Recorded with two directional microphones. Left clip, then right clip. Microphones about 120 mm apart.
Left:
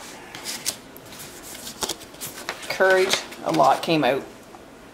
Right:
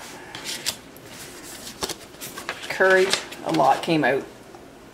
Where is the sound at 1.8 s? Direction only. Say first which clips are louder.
Left 1 dB; 15° left (ahead or behind).